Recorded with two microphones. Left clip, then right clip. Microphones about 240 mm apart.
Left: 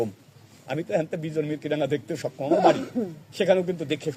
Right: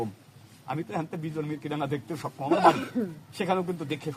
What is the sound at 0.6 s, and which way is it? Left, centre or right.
A man's voice, centre.